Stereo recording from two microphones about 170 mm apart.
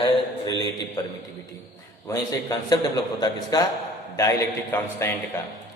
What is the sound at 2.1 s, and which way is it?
A man's voice, 25° left (ahead or behind).